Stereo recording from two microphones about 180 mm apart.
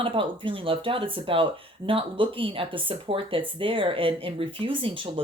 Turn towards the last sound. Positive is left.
turn(degrees=-30)  # may be behind; listen again after turning